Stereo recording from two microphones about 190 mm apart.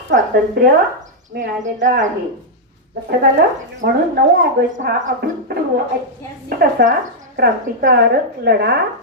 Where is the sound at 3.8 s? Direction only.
50° right (ahead or behind).